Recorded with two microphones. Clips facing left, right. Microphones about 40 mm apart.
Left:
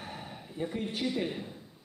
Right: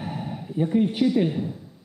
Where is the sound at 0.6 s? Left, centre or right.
Right.